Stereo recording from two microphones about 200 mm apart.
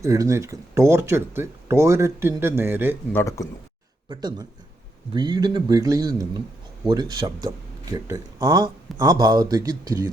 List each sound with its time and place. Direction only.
0.0 s speech: 15° right (ahead or behind)
3.1 s speech: 15° left (ahead or behind)
4.1 s speech: 20° right (ahead or behind)